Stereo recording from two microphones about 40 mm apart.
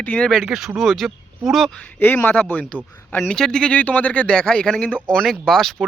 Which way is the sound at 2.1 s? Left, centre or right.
Left.